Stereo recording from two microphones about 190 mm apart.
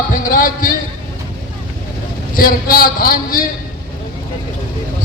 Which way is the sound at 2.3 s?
50° left (ahead or behind).